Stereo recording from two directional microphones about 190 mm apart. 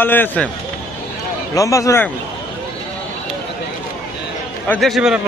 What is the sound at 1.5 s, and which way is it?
Speech, 15° left (ahead or behind).